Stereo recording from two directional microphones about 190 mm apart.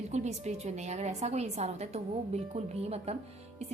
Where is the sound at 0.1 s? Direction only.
35° right (ahead or behind).